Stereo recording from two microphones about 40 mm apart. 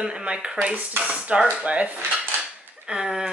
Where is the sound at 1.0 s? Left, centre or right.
Right.